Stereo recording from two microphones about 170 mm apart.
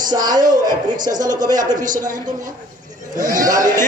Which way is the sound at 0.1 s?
25° right (ahead or behind).